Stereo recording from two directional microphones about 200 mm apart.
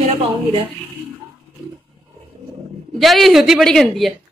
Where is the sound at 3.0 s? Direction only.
Centre (ahead or behind).